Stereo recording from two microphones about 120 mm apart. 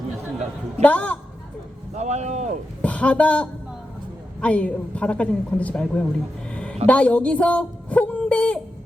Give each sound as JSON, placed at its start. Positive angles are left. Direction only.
{"t": 0.8, "sound": "a woman's voice", "side_deg": 10}
{"t": 2.0, "sound": "speech", "side_deg": -70}
{"t": 2.8, "sound": "a woman's voice", "side_deg": 10}
{"t": 6.5, "sound": "a sound", "side_deg": 10}
{"t": 6.8, "sound": "speech", "side_deg": 10}